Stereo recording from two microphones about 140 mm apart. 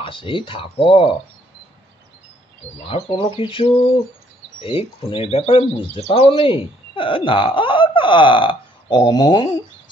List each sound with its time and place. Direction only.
0.0 s speech: 40° left (ahead or behind)
2.9 s speech: 35° left (ahead or behind)